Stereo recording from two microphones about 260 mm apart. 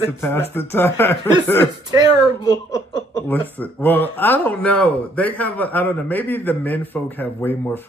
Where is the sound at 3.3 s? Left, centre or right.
Centre.